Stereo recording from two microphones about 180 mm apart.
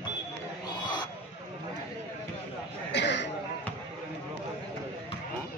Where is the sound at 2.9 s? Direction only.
75° left (ahead or behind).